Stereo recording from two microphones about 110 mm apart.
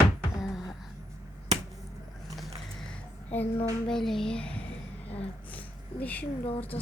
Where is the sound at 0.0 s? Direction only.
40° left (ahead or behind).